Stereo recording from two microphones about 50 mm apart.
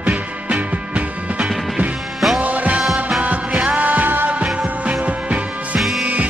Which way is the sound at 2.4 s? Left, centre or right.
Right.